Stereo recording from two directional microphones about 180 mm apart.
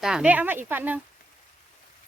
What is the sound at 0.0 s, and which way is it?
A woman's voice, 5° right (ahead or behind).